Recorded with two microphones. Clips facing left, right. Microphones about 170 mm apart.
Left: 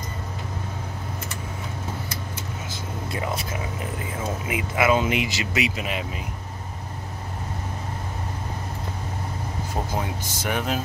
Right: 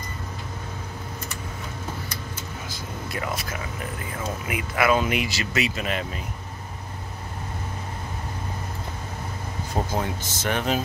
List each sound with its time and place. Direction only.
2.7 s a sound: 25° left (ahead or behind)
4.5 s speech: 20° left (ahead or behind)
9.9 s speech: 10° left (ahead or behind)